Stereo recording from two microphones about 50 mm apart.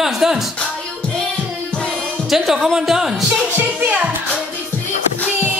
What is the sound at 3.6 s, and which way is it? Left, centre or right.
Music, right.